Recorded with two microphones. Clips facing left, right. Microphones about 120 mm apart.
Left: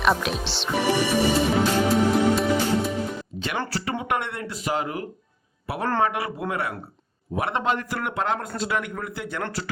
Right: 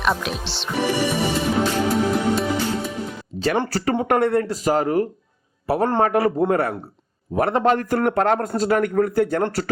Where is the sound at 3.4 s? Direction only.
35° right (ahead or behind).